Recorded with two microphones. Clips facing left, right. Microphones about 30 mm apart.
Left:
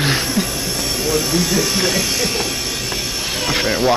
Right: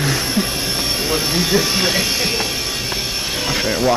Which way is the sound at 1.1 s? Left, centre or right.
Right.